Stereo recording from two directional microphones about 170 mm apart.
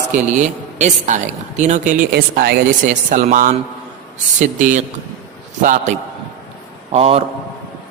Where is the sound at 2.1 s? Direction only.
70° right (ahead or behind); by 3.5 s 50° right (ahead or behind).